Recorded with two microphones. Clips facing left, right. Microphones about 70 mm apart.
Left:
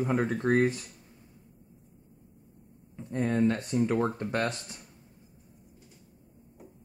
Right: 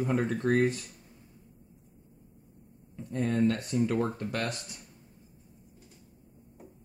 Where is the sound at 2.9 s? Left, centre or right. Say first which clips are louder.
Left 1 dB; left.